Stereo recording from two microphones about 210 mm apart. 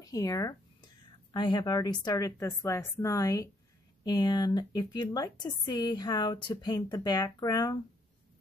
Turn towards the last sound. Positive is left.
turn(degrees=20)  # may be behind; listen again after turning